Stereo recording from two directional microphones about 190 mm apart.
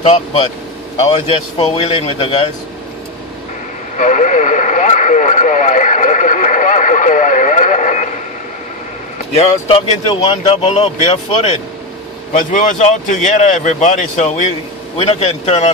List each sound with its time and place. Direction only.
0.0 s speech: 30° left (ahead or behind)
3.9 s speech: 40° left (ahead or behind)
9.3 s speech: 30° left (ahead or behind)